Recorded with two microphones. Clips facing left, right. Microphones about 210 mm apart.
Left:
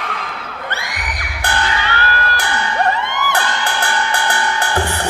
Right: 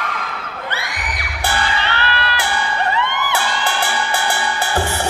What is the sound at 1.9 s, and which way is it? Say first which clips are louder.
Music: left 1 dB; 45° left (ahead or behind).